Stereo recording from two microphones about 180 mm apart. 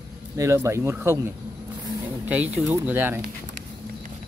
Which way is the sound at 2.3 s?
10° right (ahead or behind).